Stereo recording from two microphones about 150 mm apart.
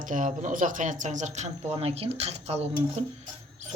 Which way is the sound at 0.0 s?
60° right (ahead or behind).